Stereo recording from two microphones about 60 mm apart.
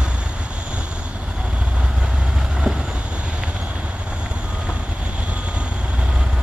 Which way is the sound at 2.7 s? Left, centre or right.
Centre.